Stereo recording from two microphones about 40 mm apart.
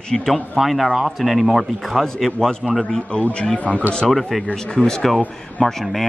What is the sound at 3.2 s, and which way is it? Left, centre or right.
Speech, left.